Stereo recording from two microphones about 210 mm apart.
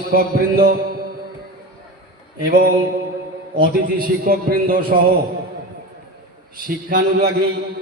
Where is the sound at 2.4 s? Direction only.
45° right (ahead or behind).